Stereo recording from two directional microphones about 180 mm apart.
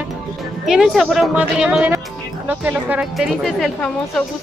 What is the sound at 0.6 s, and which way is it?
Speech, 5° right (ahead or behind).